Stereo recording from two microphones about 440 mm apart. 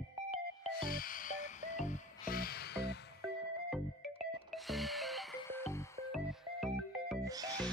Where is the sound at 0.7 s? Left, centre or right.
Centre.